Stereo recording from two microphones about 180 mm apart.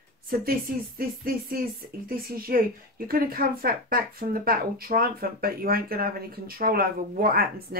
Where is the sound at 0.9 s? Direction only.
55° right (ahead or behind).